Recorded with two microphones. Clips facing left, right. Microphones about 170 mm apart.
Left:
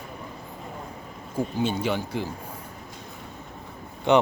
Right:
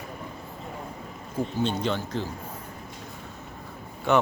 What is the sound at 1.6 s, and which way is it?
Speech, 10° left (ahead or behind).